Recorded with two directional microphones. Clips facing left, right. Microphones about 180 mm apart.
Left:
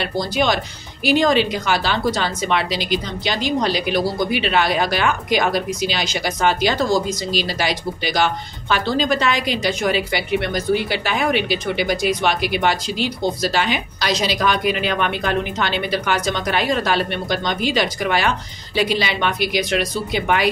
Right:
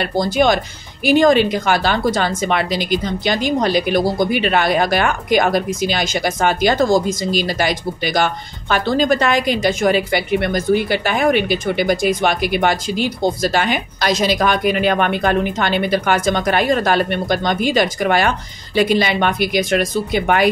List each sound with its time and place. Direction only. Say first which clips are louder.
0.0 s a woman's voice: right 5 dB; 50° right (ahead or behind)